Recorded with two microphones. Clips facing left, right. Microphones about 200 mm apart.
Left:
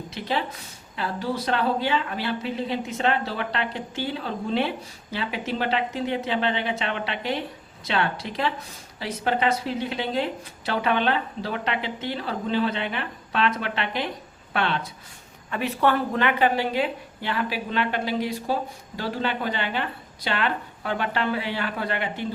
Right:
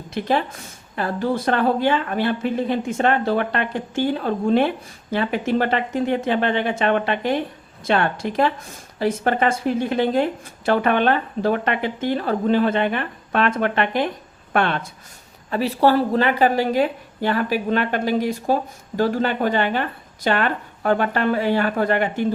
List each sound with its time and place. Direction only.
0.1 s speech: 50° right (ahead or behind)
15.4 s speech: 35° right (ahead or behind)